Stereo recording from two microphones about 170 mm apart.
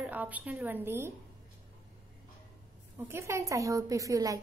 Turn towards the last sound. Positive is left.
turn(degrees=-20)  # may be behind; listen again after turning